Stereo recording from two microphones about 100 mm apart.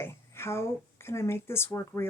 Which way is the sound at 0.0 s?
25° left (ahead or behind).